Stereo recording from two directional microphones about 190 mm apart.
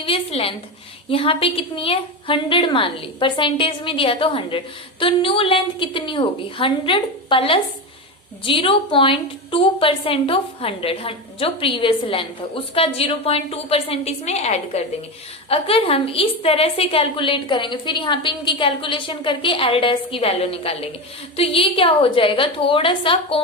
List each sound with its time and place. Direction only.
0.0 s a woman's voice: 30° left (ahead or behind)